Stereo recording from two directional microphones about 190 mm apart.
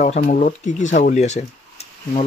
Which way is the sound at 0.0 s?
40° left (ahead or behind).